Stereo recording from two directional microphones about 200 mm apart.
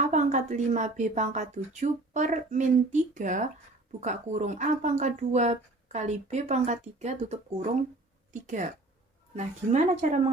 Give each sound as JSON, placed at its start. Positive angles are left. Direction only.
{"t": 0.1, "sound": "a woman's voice", "side_deg": -35}